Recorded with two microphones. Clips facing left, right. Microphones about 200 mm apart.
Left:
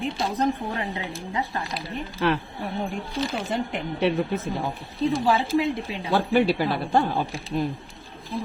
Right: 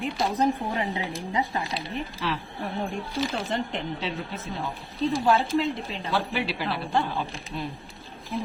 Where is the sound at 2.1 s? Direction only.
60° left (ahead or behind).